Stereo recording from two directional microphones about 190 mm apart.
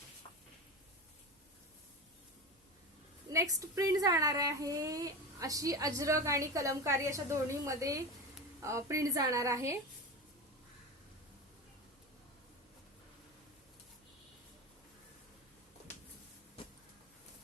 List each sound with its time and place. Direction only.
3.2 s speech: 20° right (ahead or behind)